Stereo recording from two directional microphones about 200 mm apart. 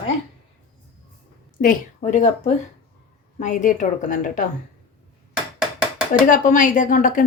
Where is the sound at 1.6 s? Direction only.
40° left (ahead or behind).